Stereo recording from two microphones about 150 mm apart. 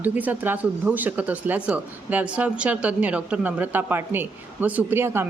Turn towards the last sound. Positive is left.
turn(degrees=-15)  # may be behind; listen again after turning